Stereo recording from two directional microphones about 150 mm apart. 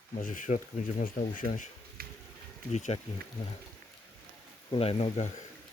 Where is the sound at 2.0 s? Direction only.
90° right.